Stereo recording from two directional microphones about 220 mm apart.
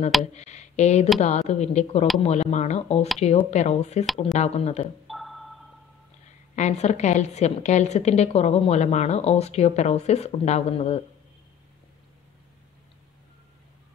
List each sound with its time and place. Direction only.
0.2 s a woman's voice: 30° left (ahead or behind)
5.0 s music: centre (ahead or behind)
6.5 s a woman's voice: 30° left (ahead or behind)